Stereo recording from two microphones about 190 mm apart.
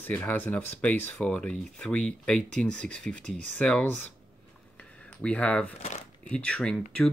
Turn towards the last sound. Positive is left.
turn(degrees=5)  # may be behind; listen again after turning